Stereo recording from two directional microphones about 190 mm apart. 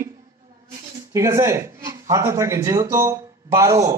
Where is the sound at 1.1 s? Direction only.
15° right (ahead or behind).